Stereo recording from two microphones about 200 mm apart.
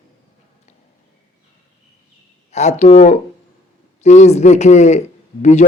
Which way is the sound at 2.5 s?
35° left (ahead or behind).